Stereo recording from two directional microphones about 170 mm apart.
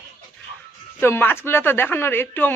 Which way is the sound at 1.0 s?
15° left (ahead or behind).